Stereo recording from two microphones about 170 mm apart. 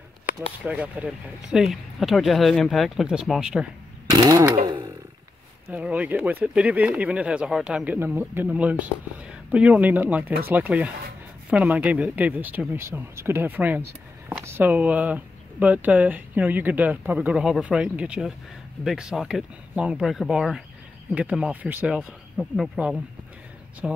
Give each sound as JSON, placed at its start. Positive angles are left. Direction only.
{"t": 0.7, "sound": "speech", "side_deg": -10}
{"t": 4.1, "sound": "speech", "side_deg": -20}
{"t": 4.6, "sound": "a sound", "side_deg": -25}
{"t": 5.7, "sound": "speech", "side_deg": -10}